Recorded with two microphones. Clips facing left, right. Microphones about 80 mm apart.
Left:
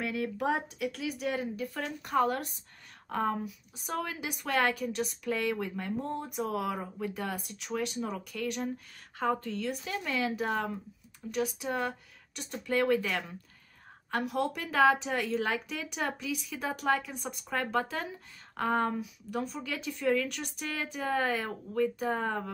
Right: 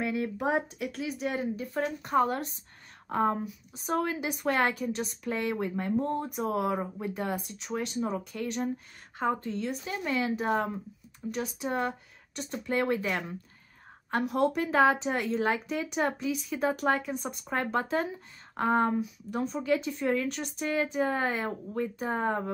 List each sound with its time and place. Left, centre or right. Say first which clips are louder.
0.0 s a woman's voice: right 2 dB; right
9.2 s speech: right 1 dB; right
11.2 s speech: right 4 dB; centre
11.6 s a woman's voice: right 2 dB; right
14.1 s a woman's voice: right 4 dB; right
17.7 s speech: right 3 dB; right
18.9 s speech: right 3 dB; right